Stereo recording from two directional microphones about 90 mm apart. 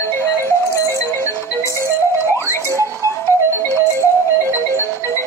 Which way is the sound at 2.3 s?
30° left (ahead or behind).